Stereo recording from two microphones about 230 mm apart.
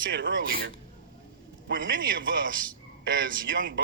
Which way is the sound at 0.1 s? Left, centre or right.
Right.